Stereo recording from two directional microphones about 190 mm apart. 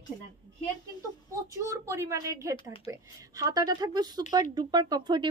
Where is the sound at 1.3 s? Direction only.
15° right (ahead or behind).